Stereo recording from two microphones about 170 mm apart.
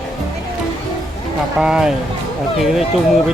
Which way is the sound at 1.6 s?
5° right (ahead or behind).